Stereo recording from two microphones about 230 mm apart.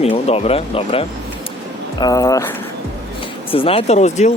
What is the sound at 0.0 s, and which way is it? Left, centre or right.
Speech, left.